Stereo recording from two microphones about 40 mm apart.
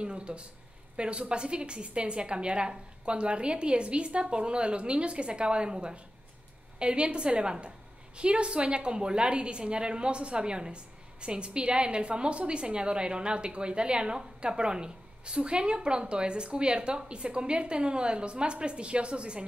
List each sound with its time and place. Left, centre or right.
0.0 s a woman's voice: right